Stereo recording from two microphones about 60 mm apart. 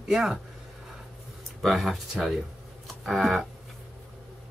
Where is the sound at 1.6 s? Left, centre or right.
Centre.